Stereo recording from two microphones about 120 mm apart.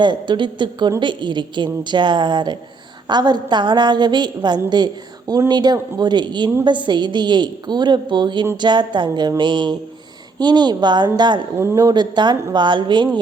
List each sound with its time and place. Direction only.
0.0 s a woman's voice: 40° right (ahead or behind)
11.5 s a woman's voice: 25° right (ahead or behind); by 13.1 s 40° right (ahead or behind)